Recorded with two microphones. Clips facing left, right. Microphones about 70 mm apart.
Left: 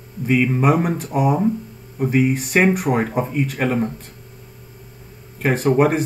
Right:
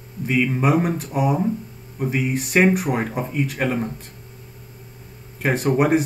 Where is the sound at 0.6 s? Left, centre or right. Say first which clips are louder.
Left 2 dB; centre.